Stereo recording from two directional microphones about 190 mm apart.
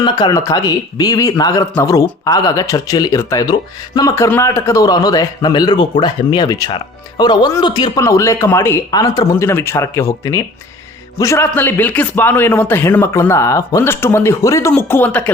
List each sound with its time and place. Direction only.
0.0 s a man's voice: 20° left (ahead or behind)